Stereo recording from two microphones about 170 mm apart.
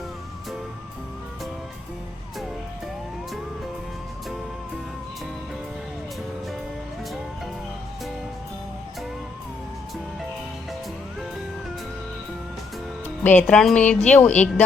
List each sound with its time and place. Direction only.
13.2 s a woman's voice: 10° left (ahead or behind)